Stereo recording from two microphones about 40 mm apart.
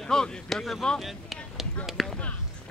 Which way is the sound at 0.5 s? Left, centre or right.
Centre.